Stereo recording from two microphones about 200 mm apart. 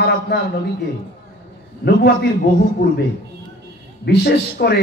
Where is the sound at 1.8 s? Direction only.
55° left (ahead or behind).